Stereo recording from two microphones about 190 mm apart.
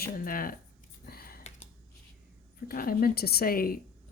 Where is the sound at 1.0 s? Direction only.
55° left (ahead or behind).